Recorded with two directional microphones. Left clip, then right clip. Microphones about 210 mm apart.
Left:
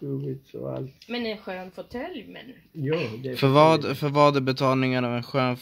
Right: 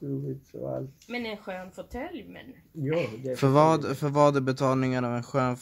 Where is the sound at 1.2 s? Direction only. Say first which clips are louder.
Left 3 dB; 45° left (ahead or behind).